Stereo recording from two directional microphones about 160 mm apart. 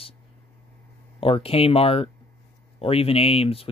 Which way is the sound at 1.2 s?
35° left (ahead or behind).